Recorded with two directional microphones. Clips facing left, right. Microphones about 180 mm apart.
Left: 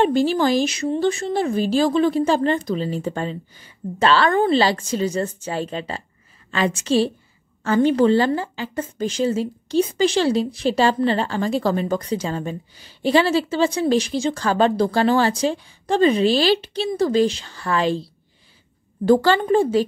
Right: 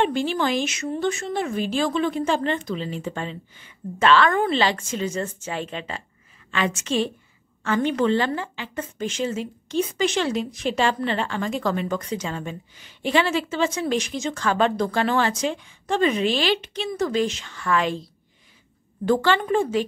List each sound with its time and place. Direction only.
0.0 s a woman's voice: 40° left (ahead or behind)